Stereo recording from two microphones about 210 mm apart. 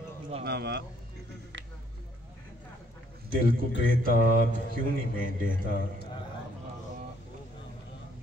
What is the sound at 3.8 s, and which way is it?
Speech, 40° right (ahead or behind).